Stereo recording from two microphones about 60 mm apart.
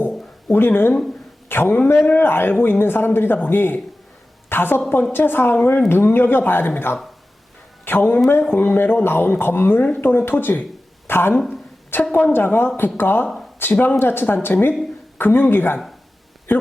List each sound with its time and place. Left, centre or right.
0.4 s a man's voice: left
4.4 s a sound: left
5.1 s speech: left